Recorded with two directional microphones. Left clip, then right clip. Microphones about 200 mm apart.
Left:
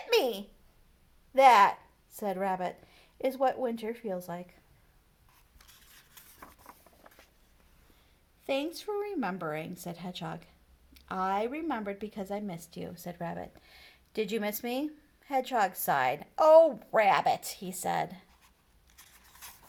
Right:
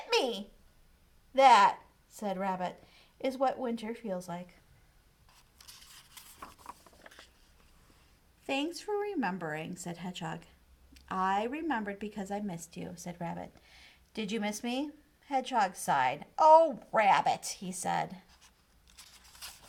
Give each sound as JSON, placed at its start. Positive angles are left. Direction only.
{"t": 0.1, "sound": "a child's voice", "side_deg": 40}
{"t": 8.4, "sound": "speech", "side_deg": 30}